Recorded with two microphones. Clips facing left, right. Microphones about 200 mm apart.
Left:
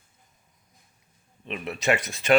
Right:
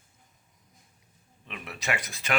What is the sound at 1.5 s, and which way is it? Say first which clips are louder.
Speech: left 8 dB; 25° left (ahead or behind).